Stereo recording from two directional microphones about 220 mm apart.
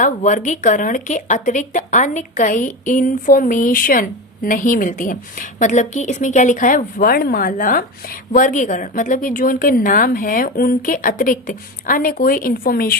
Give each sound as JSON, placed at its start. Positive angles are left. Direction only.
{"t": 0.0, "sound": "speech", "side_deg": 35}